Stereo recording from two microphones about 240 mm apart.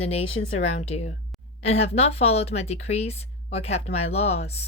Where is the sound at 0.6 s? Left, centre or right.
Left.